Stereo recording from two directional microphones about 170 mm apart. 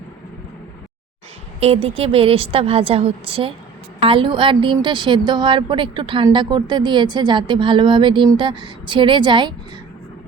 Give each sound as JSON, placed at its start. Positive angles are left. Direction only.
{"t": 1.5, "sound": "a woman's voice", "side_deg": -35}